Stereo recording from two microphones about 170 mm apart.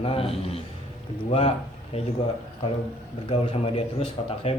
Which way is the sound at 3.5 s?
35° left (ahead or behind).